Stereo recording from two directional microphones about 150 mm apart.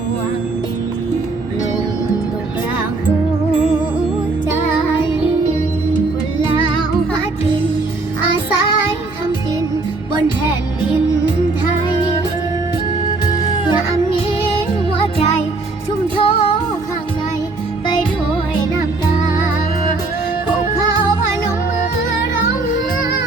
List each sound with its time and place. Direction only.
13.5 s music: 30° left (ahead or behind)
14.9 s music: 45° left (ahead or behind)